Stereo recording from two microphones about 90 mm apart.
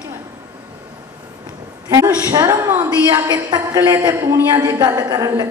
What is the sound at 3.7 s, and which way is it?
Speech, 30° right (ahead or behind).